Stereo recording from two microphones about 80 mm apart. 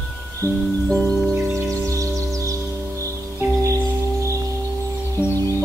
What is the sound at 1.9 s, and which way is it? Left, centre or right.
Music, right.